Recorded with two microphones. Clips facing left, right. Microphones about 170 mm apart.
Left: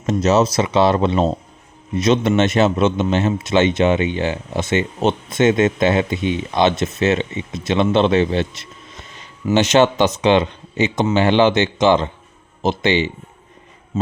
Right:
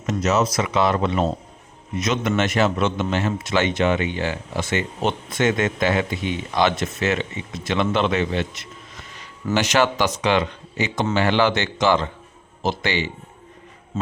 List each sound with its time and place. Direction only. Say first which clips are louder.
0.0 s a man's voice: left 5 dB; 30° left (ahead or behind)